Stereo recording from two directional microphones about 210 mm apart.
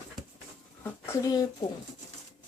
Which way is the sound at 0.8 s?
15° left (ahead or behind).